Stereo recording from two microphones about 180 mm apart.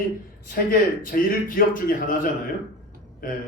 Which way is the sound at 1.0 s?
50° left (ahead or behind).